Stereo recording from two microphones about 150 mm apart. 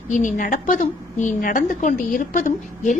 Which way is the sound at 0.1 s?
55° left (ahead or behind).